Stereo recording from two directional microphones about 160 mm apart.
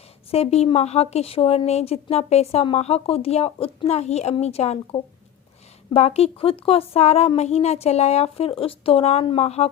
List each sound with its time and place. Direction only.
0.3 s speech: 40° left (ahead or behind)